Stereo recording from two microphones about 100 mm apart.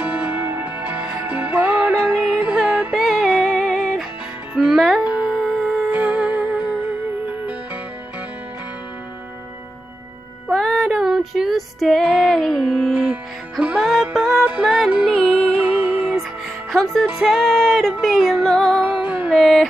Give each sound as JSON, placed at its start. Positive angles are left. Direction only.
{"t": 0.0, "sound": "music", "side_deg": -15}
{"t": 2.0, "sound": "music", "side_deg": -5}
{"t": 10.5, "sound": "female singing", "side_deg": 0}
{"t": 12.1, "sound": "music", "side_deg": 0}
{"t": 13.1, "sound": "music", "side_deg": -15}
{"t": 13.7, "sound": "music", "side_deg": 0}
{"t": 15.6, "sound": "music", "side_deg": -15}
{"t": 16.7, "sound": "music", "side_deg": 0}
{"t": 18.8, "sound": "music", "side_deg": -15}
{"t": 19.3, "sound": "a sound", "side_deg": 5}